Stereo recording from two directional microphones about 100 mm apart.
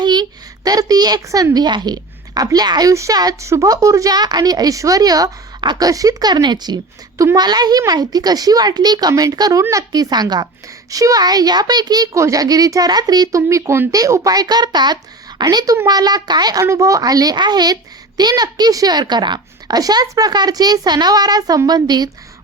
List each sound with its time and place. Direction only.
0.0 s a woman's voice: 45° right (ahead or behind)
16.6 s a woman's voice: 30° right (ahead or behind)